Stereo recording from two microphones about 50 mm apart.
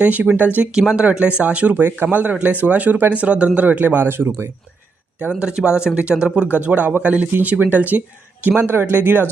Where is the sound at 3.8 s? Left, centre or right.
Right.